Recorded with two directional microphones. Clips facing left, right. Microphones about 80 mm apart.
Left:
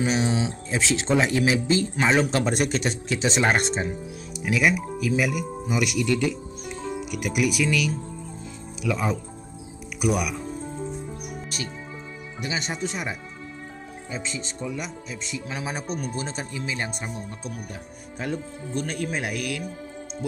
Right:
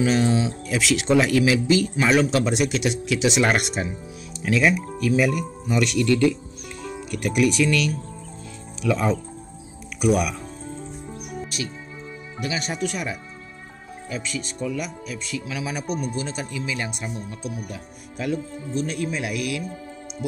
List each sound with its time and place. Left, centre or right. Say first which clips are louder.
0.0 s speech: right 3 dB; centre
0.7 s a man's voice: right 2 dB; left
2.3 s speech: right 2 dB; left
4.5 s speech: right 2 dB; centre
6.6 s music: left 5 dB; left
7.1 s speech: right 5 dB; centre
11.5 s speech: right 3 dB; left
12.4 s a man's voice: right 2 dB; left